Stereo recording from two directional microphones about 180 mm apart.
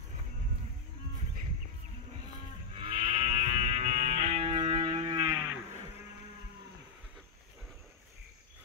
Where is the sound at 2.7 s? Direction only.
30° right (ahead or behind).